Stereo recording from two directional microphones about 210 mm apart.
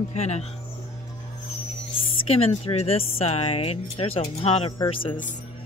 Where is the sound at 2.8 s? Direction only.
30° left (ahead or behind).